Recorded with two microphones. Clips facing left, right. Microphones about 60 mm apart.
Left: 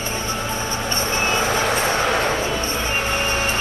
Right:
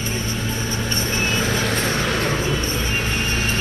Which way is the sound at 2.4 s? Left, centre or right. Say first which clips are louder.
Left 1 dB; left.